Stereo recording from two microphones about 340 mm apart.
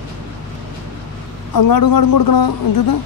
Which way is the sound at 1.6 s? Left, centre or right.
Left.